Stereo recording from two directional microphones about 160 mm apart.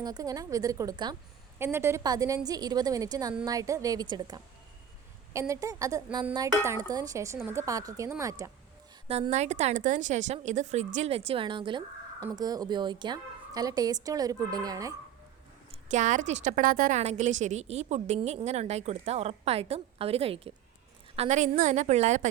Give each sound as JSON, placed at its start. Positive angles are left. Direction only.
{"t": 0.0, "sound": "a woman's voice", "side_deg": -25}
{"t": 1.5, "sound": "a woman's voice", "side_deg": -15}
{"t": 9.0, "sound": "a woman's voice", "side_deg": -40}
{"t": 15.7, "sound": "a woman's voice", "side_deg": -50}
{"t": 17.0, "sound": "a woman's voice", "side_deg": -45}
{"t": 21.2, "sound": "a woman's voice", "side_deg": -50}